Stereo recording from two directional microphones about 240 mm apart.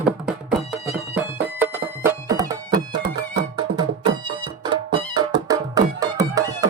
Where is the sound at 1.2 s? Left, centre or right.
Centre.